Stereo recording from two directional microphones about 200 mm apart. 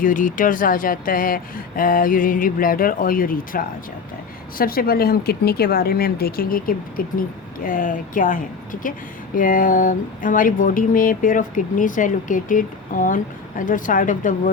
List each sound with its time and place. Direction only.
0.0 s speech: 40° left (ahead or behind)